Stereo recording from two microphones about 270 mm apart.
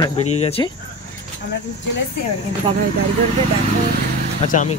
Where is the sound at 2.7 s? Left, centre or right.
Centre.